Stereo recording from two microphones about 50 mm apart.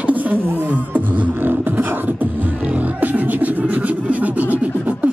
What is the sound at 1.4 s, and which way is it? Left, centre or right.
Beatboxing, right.